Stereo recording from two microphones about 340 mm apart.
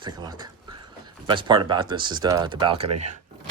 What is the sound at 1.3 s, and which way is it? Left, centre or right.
Speech, centre.